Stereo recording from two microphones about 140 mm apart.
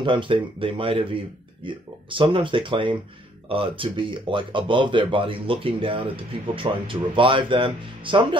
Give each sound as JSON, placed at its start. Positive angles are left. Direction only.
{"t": 0.0, "sound": "speech", "side_deg": -35}